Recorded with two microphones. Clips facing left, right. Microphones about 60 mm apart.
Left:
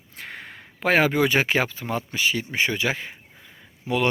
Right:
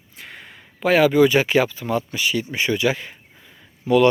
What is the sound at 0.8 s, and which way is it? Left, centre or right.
Speech, left.